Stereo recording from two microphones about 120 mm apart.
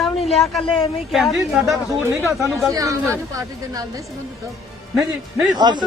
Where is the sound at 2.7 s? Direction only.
30° right (ahead or behind).